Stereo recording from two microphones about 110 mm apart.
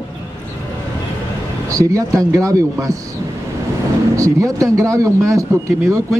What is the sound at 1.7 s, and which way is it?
Speech, 30° right (ahead or behind).